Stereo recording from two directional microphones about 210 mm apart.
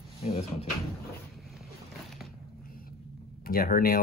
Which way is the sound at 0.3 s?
30° left (ahead or behind).